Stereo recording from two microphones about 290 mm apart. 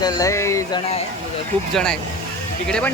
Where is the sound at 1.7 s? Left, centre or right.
Centre.